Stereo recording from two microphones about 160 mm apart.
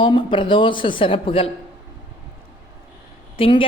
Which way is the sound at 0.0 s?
30° left (ahead or behind).